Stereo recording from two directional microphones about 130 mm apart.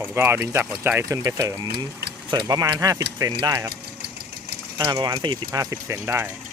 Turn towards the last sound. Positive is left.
turn(degrees=-20)  # may be behind; listen again after turning